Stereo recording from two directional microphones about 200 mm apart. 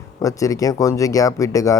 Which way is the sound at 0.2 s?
15° left (ahead or behind).